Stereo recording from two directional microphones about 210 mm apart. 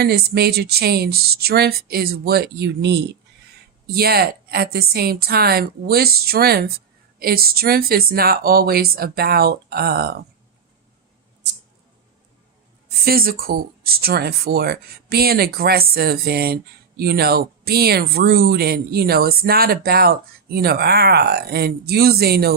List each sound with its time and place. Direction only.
0.0 s a woman's voice: 50° right (ahead or behind)
13.1 s a woman's voice: 45° right (ahead or behind)